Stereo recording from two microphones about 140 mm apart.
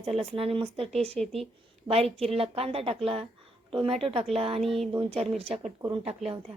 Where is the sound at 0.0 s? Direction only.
45° right (ahead or behind).